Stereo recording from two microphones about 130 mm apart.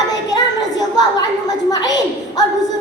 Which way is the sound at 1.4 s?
30° left (ahead or behind).